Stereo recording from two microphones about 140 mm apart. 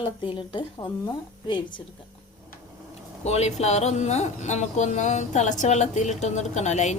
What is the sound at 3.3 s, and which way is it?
Speech, 50° left (ahead or behind).